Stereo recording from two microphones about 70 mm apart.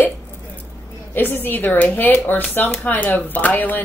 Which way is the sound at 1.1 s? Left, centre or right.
Left.